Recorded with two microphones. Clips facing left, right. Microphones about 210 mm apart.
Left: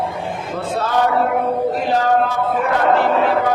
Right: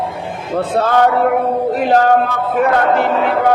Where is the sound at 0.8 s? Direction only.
60° right (ahead or behind).